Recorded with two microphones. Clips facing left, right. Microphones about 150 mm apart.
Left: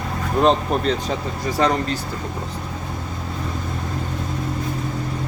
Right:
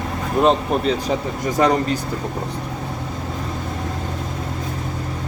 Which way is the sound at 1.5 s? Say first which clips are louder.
Right 3 dB; 15° right (ahead or behind).